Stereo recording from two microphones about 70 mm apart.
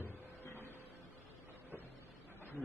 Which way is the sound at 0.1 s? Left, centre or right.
Left.